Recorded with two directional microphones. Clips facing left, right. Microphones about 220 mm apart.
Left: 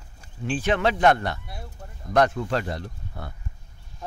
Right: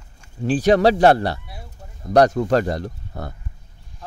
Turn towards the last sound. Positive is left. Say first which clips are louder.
# right 6 dB
turn(degrees=-40)  # may be behind; listen again after turning